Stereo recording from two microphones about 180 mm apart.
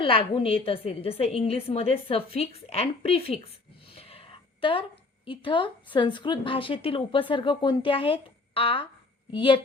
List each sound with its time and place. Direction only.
0.0 s a woman's voice: 30° left (ahead or behind)